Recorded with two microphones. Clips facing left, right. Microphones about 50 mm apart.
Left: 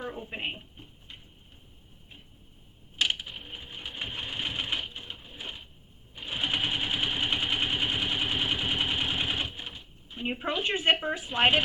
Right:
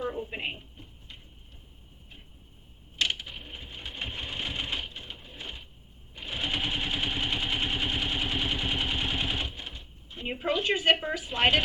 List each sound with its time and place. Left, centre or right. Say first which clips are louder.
3.0 s a sound: left 1 dB; centre
4.0 s sewing machine: left 1 dB; centre
6.2 s vehicle: left 1 dB; centre
10.5 s speech: right 2 dB; left